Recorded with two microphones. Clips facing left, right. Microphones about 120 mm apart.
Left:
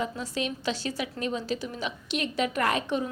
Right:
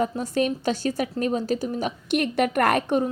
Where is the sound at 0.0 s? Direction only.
50° right (ahead or behind).